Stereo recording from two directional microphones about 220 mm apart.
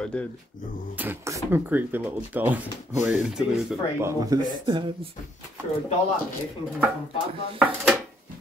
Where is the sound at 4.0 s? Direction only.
15° right (ahead or behind).